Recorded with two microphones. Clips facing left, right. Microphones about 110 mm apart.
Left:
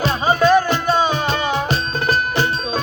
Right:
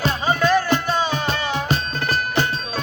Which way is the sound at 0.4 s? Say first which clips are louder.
Left 4 dB; 15° left (ahead or behind).